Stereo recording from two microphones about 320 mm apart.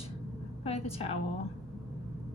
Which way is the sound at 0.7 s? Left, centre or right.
Centre.